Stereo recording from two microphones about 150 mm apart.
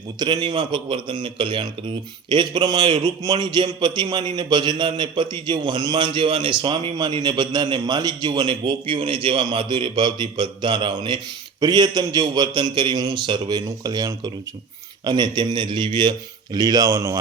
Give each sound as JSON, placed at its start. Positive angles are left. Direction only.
{"t": 0.2, "sound": "a man's voice", "side_deg": -30}